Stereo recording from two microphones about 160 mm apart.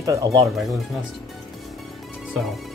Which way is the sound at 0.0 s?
20° right (ahead or behind).